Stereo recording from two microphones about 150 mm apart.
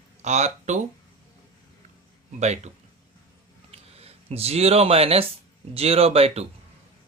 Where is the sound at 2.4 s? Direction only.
50° right (ahead or behind).